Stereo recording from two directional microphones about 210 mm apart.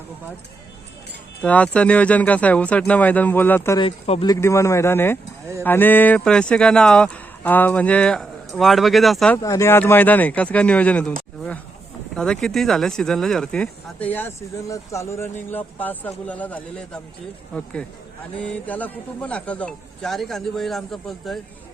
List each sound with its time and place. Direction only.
1.4 s speech: 5° left (ahead or behind)
3.8 s speech: 25° left (ahead or behind)
4.3 s speech: 15° left (ahead or behind)
9.4 s speech: 15° left (ahead or behind)
12.1 s speech: 5° left (ahead or behind)